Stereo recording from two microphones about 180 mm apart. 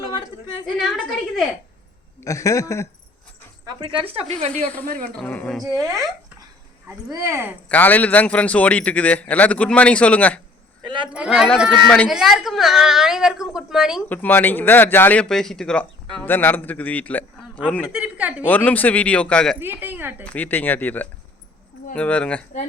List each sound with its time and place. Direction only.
0.8 s speech: centre (ahead or behind)
2.2 s speech: 20° left (ahead or behind)
3.7 s speech: 25° right (ahead or behind)
4.5 s speech: 10° left (ahead or behind)
7.1 s a woman's voice: 15° right (ahead or behind)
7.7 s speech: 10° left (ahead or behind)
10.8 s speech: 25° right (ahead or behind)
11.1 s speech: 5° right (ahead or behind)
14.1 s speech: 10° left (ahead or behind)
17.9 s a woman's voice: 5° right (ahead or behind)
18.4 s speech: 10° left (ahead or behind)
19.8 s a woman's voice: 10° right (ahead or behind)
20.2 s speech: 10° left (ahead or behind)